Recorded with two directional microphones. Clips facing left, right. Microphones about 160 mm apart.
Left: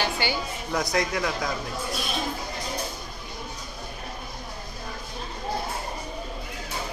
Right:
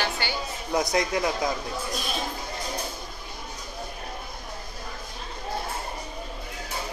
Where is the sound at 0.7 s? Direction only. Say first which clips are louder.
Right 2 dB; 20° right (ahead or behind).